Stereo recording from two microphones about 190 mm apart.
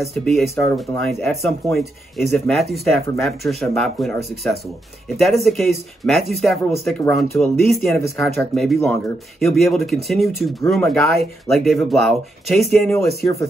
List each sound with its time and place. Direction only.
0.1 s speech: centre (ahead or behind)